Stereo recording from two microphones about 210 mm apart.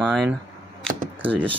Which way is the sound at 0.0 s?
5° right (ahead or behind).